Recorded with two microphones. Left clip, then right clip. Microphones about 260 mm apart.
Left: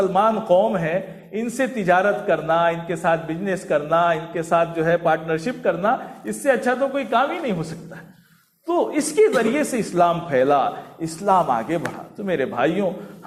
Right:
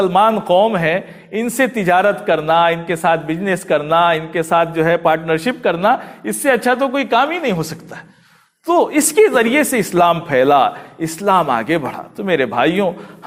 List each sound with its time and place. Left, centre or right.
0.0 s a man's voice: right